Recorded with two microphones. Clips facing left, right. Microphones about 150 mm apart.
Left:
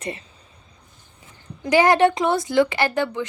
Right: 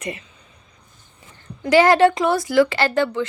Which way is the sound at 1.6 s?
15° left (ahead or behind).